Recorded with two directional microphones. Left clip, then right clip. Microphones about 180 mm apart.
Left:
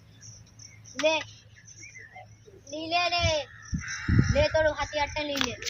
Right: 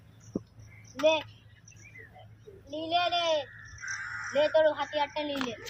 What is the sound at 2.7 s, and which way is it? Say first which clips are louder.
Child singing: left 1 dB; 20° left (ahead or behind).